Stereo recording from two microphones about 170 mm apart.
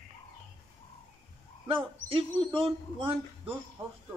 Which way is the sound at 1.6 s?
30° right (ahead or behind).